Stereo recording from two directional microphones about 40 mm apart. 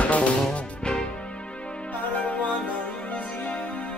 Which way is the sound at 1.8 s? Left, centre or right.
Left.